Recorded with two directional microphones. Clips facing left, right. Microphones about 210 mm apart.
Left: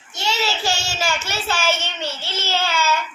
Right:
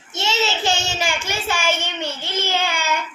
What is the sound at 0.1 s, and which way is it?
Child singing, 20° right (ahead or behind).